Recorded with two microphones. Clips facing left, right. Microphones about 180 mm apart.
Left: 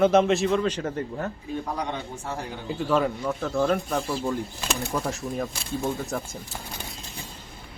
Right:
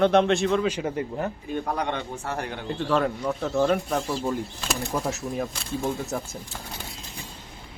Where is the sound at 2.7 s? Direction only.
5° left (ahead or behind).